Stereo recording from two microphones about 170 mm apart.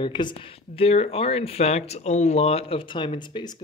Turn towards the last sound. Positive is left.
turn(degrees=30)  # may be behind; listen again after turning